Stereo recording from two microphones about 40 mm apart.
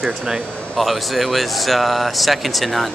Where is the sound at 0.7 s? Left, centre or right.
Centre.